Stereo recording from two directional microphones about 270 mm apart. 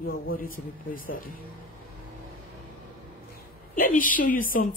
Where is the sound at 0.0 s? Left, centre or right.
Left.